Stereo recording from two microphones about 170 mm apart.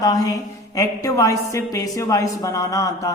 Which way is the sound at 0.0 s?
20° left (ahead or behind).